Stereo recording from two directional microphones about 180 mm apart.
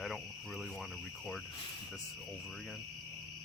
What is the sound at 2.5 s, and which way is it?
Cricket, centre (ahead or behind).